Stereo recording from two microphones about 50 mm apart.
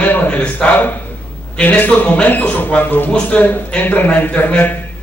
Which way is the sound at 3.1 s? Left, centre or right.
Left.